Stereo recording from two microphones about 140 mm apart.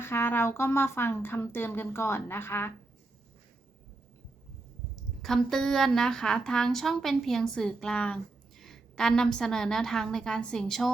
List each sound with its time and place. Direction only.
0.0 s a woman's voice: 15° left (ahead or behind)
5.2 s speech: 5° left (ahead or behind)